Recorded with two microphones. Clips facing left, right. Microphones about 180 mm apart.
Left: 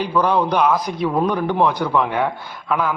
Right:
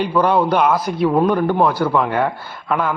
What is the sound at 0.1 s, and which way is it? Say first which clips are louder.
A man's voice: right 1 dB; 5° right (ahead or behind).